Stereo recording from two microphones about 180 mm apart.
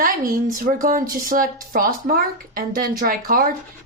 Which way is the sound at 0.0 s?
50° right (ahead or behind).